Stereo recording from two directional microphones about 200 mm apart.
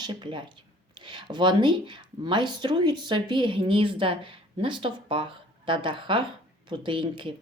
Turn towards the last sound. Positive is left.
turn(degrees=-25)  # may be behind; listen again after turning